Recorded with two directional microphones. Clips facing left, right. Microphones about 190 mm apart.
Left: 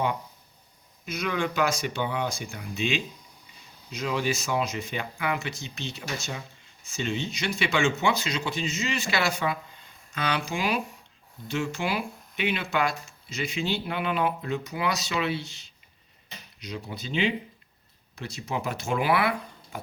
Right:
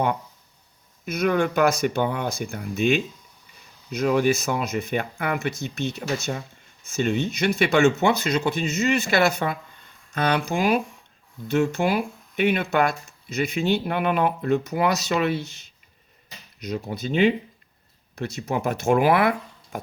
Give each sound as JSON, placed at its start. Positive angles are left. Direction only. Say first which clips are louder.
{"t": 1.0, "sound": "speech", "louder": "right 7 dB", "side_deg": -55}
{"t": 7.8, "sound": "speech", "louder": "right 7 dB", "side_deg": -40}
{"t": 8.0, "sound": "speech", "louder": "right 6 dB", "side_deg": -55}
{"t": 8.6, "sound": "speech", "louder": "right 6 dB", "side_deg": -40}
{"t": 8.9, "sound": "speech", "louder": "right 9 dB", "side_deg": -55}
{"t": 16.6, "sound": "speech", "louder": "right 8 dB", "side_deg": -45}